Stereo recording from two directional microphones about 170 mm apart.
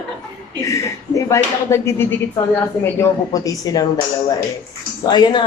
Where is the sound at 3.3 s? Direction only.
20° left (ahead or behind).